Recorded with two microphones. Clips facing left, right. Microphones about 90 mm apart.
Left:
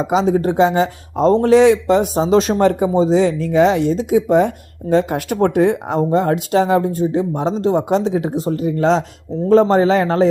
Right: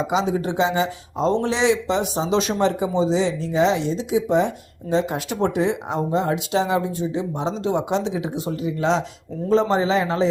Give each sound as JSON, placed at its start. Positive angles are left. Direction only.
{"t": 0.0, "sound": "speech", "side_deg": 45}